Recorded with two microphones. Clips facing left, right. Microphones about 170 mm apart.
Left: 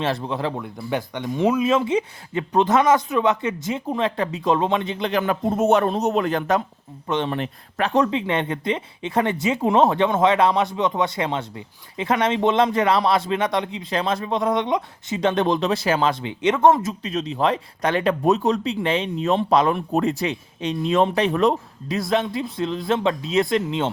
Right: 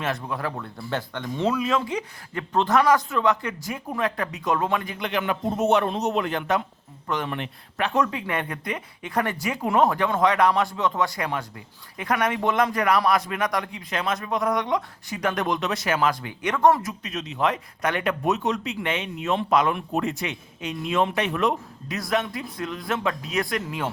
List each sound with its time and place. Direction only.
0.0 s speech: 30° left (ahead or behind)
0.6 s speech: 15° left (ahead or behind); by 6.6 s 40° left (ahead or behind)
7.1 s speech: 30° left (ahead or behind)